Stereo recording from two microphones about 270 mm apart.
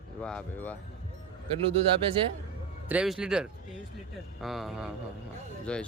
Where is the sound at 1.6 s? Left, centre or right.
Right.